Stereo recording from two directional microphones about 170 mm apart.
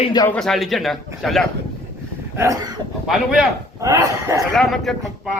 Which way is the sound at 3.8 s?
20° right (ahead or behind).